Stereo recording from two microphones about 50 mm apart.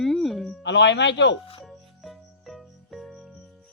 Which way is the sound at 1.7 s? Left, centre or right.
Centre.